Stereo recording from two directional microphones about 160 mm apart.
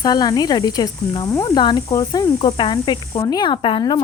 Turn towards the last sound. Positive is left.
turn(degrees=30)  # may be behind; listen again after turning